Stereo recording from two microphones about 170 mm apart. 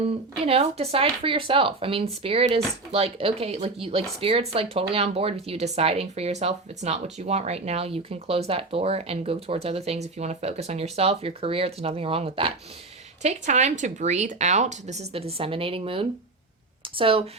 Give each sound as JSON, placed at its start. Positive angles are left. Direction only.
{"t": 0.0, "sound": "speech", "side_deg": -35}